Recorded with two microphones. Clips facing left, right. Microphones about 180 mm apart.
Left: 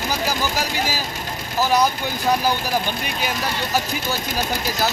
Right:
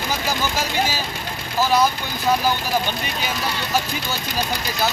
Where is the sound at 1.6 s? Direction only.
15° left (ahead or behind).